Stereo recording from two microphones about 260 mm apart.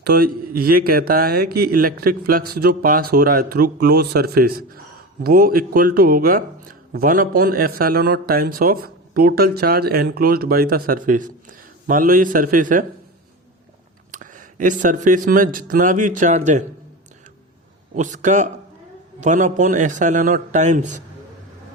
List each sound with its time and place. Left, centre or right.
0.0 s speech: right
14.1 s speech: right
17.9 s speech: right